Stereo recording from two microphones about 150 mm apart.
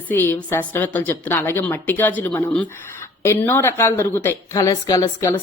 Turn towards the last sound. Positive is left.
turn(degrees=20)  # may be behind; listen again after turning